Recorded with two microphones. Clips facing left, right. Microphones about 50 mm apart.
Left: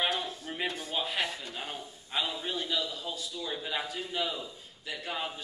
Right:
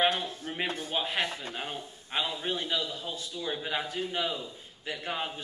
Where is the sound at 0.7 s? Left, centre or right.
Right.